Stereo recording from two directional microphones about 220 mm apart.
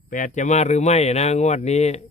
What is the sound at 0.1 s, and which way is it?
Speech, 35° left (ahead or behind).